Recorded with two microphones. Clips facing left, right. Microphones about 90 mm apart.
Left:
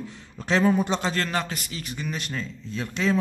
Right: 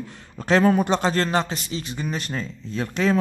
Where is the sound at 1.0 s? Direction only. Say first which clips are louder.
Right 5 dB; 35° right (ahead or behind).